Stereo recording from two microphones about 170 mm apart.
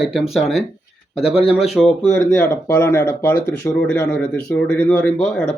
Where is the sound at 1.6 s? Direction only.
Centre (ahead or behind).